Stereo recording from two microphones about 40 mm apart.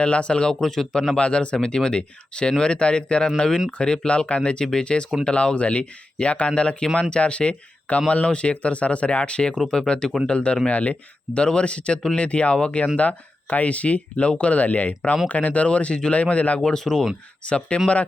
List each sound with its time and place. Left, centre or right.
0.0 s speech: left
0.6 s speech: centre
1.1 s speech: left
16.7 s speech: centre
17.4 s speech: left